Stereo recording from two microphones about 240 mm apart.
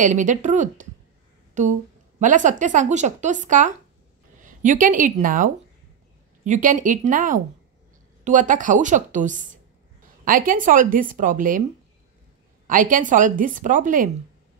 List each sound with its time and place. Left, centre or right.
0.0 s a woman's voice: right
12.6 s speech: right